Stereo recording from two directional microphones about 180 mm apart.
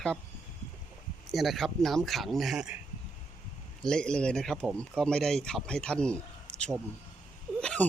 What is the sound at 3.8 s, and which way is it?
Speech, 5° left (ahead or behind).